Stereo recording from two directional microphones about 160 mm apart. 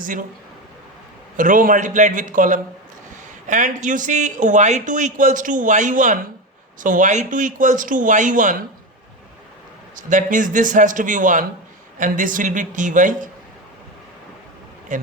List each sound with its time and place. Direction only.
1.4 s a man's voice: 55° right (ahead or behind)
9.9 s speech: 55° right (ahead or behind)